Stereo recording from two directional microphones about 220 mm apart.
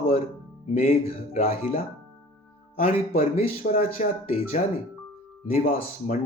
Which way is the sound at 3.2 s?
35° left (ahead or behind).